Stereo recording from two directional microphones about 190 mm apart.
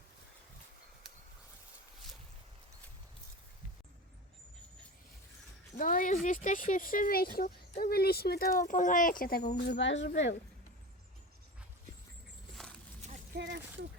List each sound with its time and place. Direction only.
5.7 s speech: 45° left (ahead or behind)
9.6 s speech: 65° left (ahead or behind)
12.6 s walk: 5° left (ahead or behind)
13.3 s speech: 70° right (ahead or behind)